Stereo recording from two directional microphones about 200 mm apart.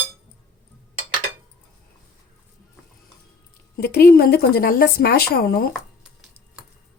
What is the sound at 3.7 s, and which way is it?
Speech, 50° left (ahead or behind).